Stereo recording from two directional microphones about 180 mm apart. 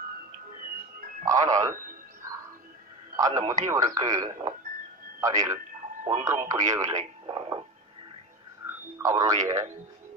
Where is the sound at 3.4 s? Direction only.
40° right (ahead or behind).